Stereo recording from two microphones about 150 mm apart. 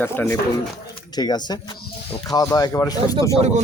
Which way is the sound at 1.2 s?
30° left (ahead or behind).